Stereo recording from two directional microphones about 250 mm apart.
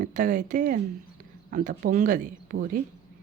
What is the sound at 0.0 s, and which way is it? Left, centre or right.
Speech, right.